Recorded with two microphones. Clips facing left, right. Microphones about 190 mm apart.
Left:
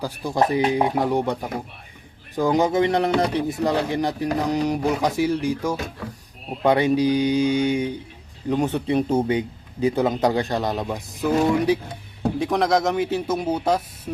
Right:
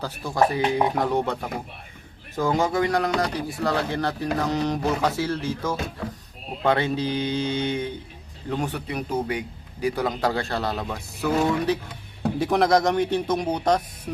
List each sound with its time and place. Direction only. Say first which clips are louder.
0.0 s speech: left 1 dB; 15° left (ahead or behind)
12.4 s speech: right 1 dB; centre (ahead or behind)